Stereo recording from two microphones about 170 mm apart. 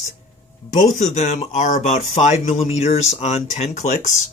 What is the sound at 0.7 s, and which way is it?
Speech, 45° left (ahead or behind).